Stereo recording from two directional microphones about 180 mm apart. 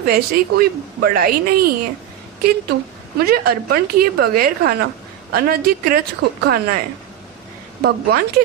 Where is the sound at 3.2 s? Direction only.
60° right (ahead or behind).